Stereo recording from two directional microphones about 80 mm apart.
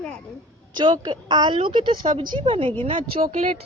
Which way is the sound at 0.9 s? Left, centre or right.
Right.